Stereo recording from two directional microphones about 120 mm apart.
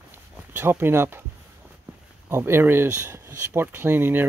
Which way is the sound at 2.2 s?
20° right (ahead or behind).